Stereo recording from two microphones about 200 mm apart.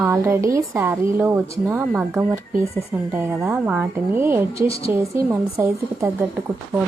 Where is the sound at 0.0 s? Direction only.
10° right (ahead or behind).